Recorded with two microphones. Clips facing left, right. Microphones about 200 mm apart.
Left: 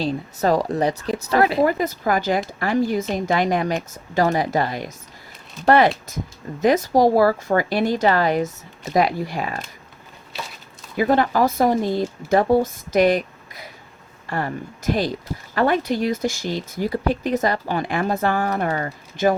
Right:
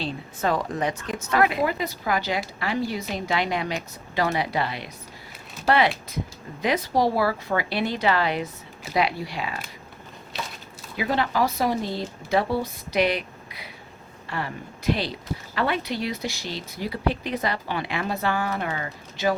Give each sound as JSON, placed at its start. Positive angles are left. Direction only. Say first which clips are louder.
{"t": 0.0, "sound": "a woman's voice", "louder": "left 6 dB", "side_deg": 40}
{"t": 1.6, "sound": "speech", "louder": "left 6 dB", "side_deg": 50}
{"t": 10.9, "sound": "speech", "louder": "left 6 dB", "side_deg": 45}